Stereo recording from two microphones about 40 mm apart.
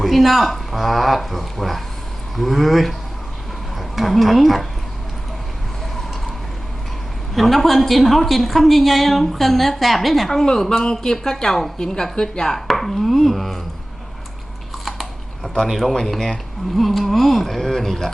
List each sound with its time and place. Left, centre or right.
0.0 s a woman's voice: centre
7.3 s a woman's voice: centre
15.6 s a woman's voice: centre
15.9 s a woman's voice: centre
16.7 s a woman's voice: centre